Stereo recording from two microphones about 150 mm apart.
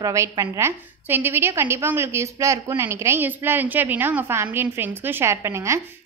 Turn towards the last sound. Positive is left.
turn(degrees=-20)  # may be behind; listen again after turning